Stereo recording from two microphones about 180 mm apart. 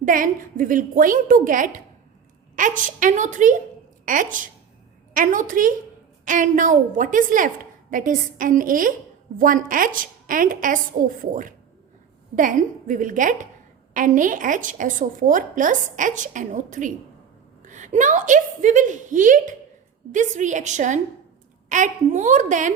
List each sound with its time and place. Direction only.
0.0 s a woman's voice: 50° right (ahead or behind)